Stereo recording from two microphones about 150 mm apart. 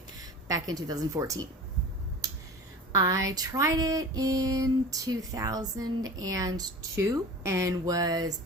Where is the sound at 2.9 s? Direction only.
20° right (ahead or behind).